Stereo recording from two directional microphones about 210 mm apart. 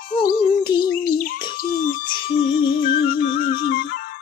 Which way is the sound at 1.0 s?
45° left (ahead or behind).